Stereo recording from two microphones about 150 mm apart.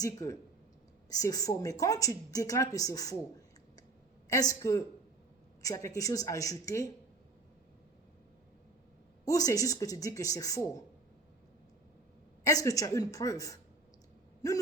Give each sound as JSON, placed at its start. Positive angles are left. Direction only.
{"t": 0.0, "sound": "a woman's voice", "side_deg": 20}
{"t": 4.3, "sound": "a woman's voice", "side_deg": 20}
{"t": 9.2, "sound": "a woman's voice", "side_deg": 20}
{"t": 12.5, "sound": "a woman's voice", "side_deg": 20}